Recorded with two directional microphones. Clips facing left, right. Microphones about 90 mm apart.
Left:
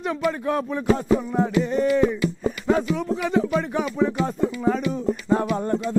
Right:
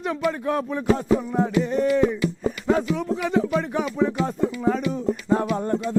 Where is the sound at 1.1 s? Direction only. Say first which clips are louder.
Even; 20° left (ahead or behind).